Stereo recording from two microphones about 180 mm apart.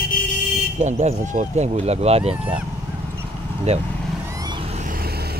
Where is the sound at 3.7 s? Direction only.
35° right (ahead or behind).